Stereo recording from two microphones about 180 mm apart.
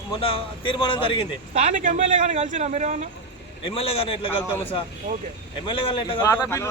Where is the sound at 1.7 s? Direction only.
45° right (ahead or behind).